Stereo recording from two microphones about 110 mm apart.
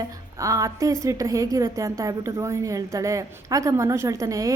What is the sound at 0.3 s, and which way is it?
A woman's voice, 30° right (ahead or behind).